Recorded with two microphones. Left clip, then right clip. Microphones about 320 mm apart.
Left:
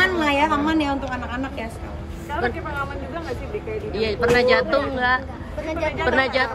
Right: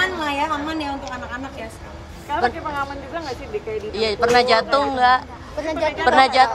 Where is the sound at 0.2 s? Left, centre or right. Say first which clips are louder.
Left 3 dB; centre.